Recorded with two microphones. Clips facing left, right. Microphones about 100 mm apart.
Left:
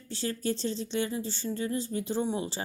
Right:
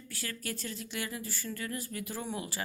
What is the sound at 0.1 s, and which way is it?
A woman's voice, 25° left (ahead or behind).